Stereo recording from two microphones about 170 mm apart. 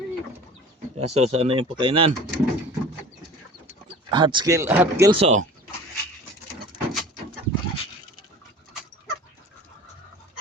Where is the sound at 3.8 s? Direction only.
25° right (ahead or behind).